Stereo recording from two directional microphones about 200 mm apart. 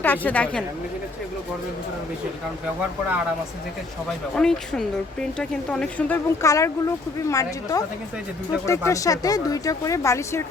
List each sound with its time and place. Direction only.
0.0 s speech: 10° left (ahead or behind)
4.4 s speech: 5° left (ahead or behind)